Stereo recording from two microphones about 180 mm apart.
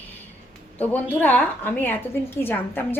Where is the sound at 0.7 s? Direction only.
10° left (ahead or behind).